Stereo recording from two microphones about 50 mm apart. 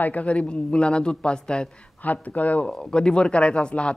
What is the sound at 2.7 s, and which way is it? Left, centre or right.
Speech, centre.